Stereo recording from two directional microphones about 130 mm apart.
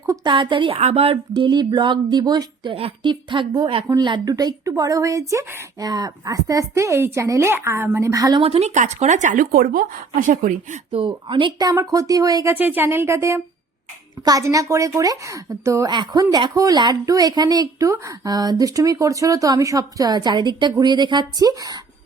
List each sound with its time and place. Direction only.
0.3 s speech: 40° right (ahead or behind)
0.8 s speech: 50° right (ahead or behind); by 2.7 s 30° right (ahead or behind)
2.7 s speech: 45° right (ahead or behind); by 8.4 s 25° right (ahead or behind)
8.4 s a woman's voice: 50° right (ahead or behind); by 10.8 s 85° right
10.9 s speech: 40° right (ahead or behind)
11.7 s speech: 25° right (ahead or behind)
12.5 s speech: 15° right (ahead or behind); by 21.8 s 30° right (ahead or behind)